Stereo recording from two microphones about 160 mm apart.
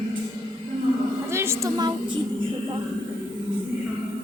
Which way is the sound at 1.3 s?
15° right (ahead or behind).